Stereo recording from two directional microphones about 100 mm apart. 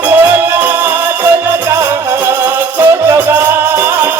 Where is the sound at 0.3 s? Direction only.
25° right (ahead or behind).